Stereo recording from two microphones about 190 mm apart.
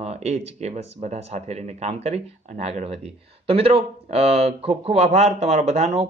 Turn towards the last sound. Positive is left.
turn(degrees=-30)  # may be behind; listen again after turning